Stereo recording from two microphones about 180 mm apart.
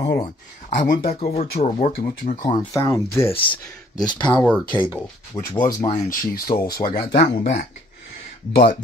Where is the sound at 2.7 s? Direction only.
15° left (ahead or behind).